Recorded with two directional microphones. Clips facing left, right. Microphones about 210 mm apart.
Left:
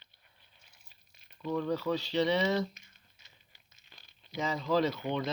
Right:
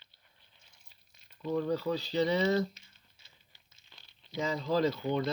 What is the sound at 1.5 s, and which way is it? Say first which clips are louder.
Speech: even; 35° right (ahead or behind).